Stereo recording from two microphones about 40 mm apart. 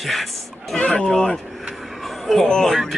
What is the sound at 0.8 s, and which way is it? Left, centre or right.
Speech, left.